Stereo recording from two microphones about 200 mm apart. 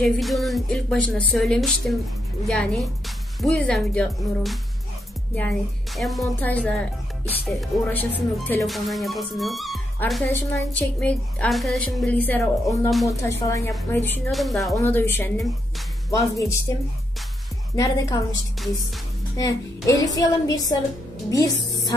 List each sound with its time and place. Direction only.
0.0 s a woman's voice: centre (ahead or behind)
14.3 s a woman's voice: centre (ahead or behind)
14.8 s a woman's voice: 10° left (ahead or behind)
17.7 s a woman's voice: 15° left (ahead or behind)
20.4 s a sound: 20° left (ahead or behind)
21.3 s speech: 15° left (ahead or behind)